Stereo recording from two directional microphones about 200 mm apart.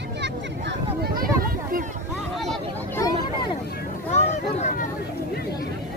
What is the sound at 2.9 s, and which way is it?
Vehicle, 20° left (ahead or behind).